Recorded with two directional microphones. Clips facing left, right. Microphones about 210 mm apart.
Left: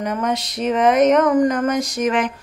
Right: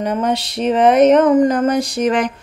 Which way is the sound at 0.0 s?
30° right (ahead or behind).